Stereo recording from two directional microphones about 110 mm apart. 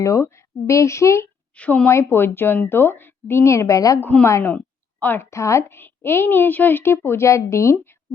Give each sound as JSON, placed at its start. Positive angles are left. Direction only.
{"t": 0.0, "sound": "a woman's voice", "side_deg": 30}
{"t": 1.5, "sound": "speech", "side_deg": 10}
{"t": 1.9, "sound": "a woman's voice", "side_deg": 25}
{"t": 4.0, "sound": "a woman's voice", "side_deg": 20}